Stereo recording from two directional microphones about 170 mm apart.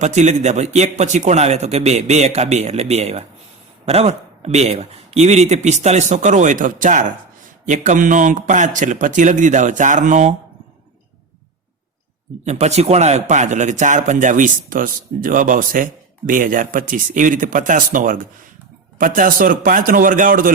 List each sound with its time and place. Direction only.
0.0 s a man's voice: 45° right (ahead or behind)
12.5 s a man's voice: 40° right (ahead or behind)